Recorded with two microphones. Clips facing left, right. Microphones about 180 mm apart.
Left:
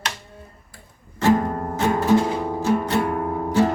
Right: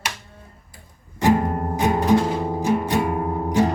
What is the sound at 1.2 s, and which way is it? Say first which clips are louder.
Music: even; 15° right (ahead or behind).